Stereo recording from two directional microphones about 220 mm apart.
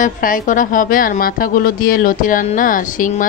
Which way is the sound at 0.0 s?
40° left (ahead or behind).